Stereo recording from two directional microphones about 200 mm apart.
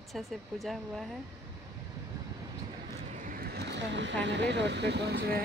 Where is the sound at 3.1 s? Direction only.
40° right (ahead or behind).